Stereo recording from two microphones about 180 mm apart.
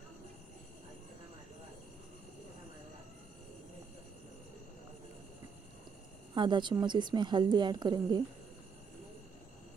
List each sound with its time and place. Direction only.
6.3 s a woman's voice: 25° right (ahead or behind)